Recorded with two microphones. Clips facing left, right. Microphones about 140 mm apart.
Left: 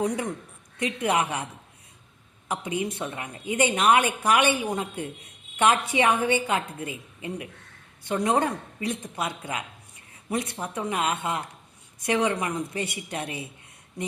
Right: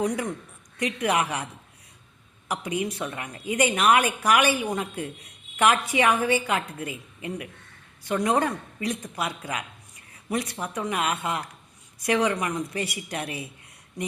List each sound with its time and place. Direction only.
0.8 s a woman's voice: 30° left (ahead or behind)
2.5 s a woman's voice: 25° left (ahead or behind)